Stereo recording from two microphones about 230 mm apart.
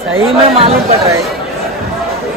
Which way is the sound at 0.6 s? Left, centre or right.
Right.